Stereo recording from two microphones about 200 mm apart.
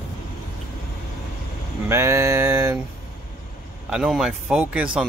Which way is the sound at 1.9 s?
10° right (ahead or behind).